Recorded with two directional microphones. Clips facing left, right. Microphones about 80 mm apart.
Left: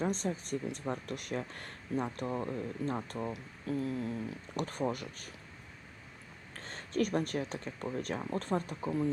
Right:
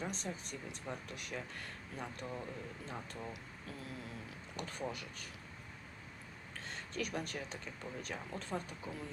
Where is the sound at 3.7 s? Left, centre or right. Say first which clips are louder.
Left 15 dB; left.